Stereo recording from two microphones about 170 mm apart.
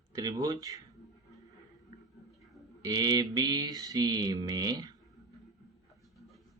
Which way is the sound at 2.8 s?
20° right (ahead or behind).